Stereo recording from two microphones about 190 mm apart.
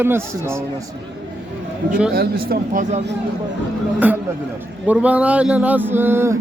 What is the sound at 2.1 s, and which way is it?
Speech, 50° right (ahead or behind).